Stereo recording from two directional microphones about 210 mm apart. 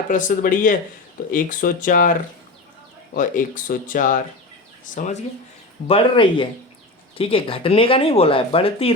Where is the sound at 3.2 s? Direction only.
40° left (ahead or behind).